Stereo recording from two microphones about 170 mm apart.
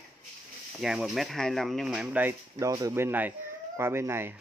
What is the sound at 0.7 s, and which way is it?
Speech, 5° right (ahead or behind).